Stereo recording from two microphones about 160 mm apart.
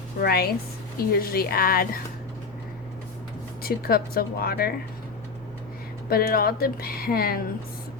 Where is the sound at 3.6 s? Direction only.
70° left (ahead or behind).